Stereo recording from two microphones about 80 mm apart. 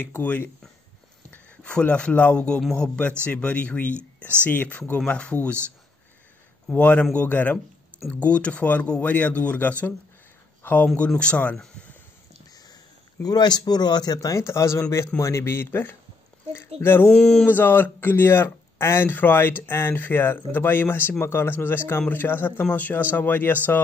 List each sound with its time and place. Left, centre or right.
0.0 s speech: left
1.3 s speech: centre
6.7 s speech: centre
13.2 s speech: left
14.4 s speech: left
17.1 s speech: centre
17.5 s speech: left